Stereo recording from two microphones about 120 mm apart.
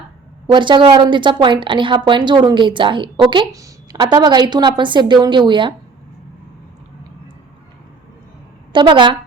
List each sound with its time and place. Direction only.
0.5 s a woman's voice: 40° right (ahead or behind)
3.5 s a woman's voice: 30° right (ahead or behind)
8.7 s a woman's voice: 40° right (ahead or behind)